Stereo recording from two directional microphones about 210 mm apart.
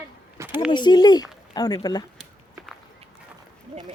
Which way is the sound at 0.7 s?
20° left (ahead or behind).